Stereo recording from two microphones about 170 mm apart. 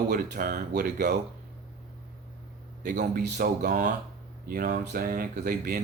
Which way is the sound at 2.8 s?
50° right (ahead or behind).